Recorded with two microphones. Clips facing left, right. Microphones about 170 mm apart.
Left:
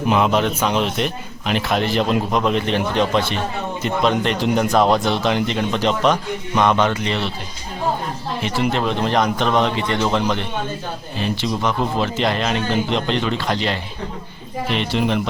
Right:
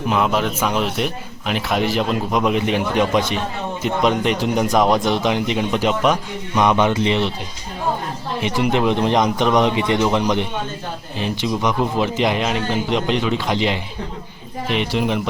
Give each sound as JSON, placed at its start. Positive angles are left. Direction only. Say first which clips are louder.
{"t": 0.1, "sound": "a man's voice", "louder": "left 2 dB", "side_deg": 0}
{"t": 8.4, "sound": "speech", "louder": "right 2 dB", "side_deg": -15}